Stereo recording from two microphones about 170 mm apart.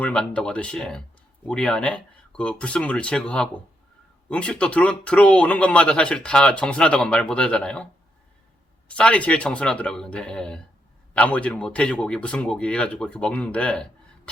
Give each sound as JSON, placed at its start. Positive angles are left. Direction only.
{"t": 0.0, "sound": "speech", "side_deg": 5}
{"t": 8.9, "sound": "speech", "side_deg": 5}